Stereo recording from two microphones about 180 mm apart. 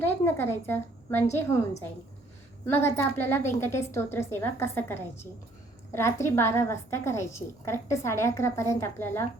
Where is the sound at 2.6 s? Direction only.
10° left (ahead or behind).